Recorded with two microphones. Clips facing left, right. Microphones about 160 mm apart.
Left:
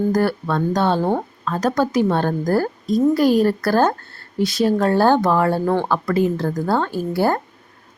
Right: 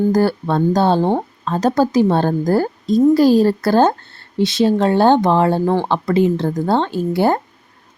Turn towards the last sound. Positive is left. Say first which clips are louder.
# right 3 dB
turn(degrees=-20)  # may be behind; listen again after turning